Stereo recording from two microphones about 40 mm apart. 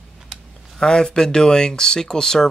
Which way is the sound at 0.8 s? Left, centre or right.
Left.